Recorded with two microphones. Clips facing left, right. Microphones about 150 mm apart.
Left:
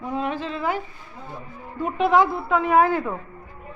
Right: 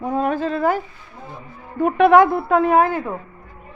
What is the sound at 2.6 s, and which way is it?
Speech, 40° right (ahead or behind).